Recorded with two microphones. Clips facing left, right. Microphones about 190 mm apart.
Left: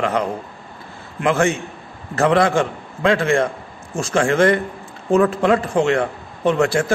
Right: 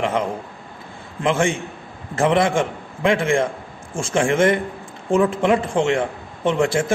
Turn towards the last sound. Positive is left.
turn(degrees=-25)  # may be behind; listen again after turning